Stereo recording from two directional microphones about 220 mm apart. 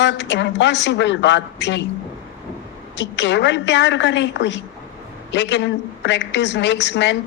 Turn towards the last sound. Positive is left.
turn(degrees=55)  # may be behind; listen again after turning